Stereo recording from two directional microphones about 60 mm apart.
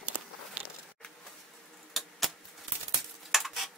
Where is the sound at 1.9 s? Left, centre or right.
Centre.